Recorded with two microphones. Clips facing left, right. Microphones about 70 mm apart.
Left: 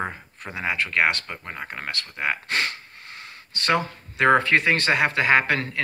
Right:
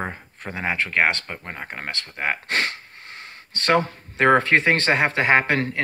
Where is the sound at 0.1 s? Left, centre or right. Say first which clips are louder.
Right 2 dB; right.